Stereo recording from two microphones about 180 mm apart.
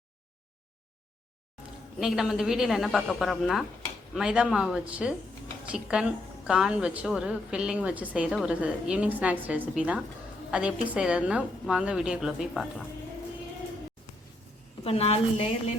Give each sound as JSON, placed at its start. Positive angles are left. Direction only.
{"t": 2.0, "sound": "a woman's voice", "side_deg": 0}
{"t": 14.8, "sound": "a woman's voice", "side_deg": 35}